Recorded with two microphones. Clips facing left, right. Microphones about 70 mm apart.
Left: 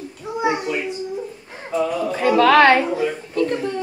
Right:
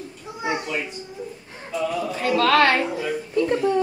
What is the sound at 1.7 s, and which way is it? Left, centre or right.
Speech, left.